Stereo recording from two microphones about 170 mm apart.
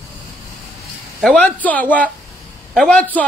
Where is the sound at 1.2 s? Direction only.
5° left (ahead or behind).